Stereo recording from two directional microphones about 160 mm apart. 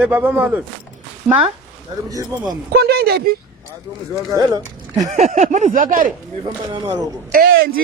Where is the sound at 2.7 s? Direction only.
80° right.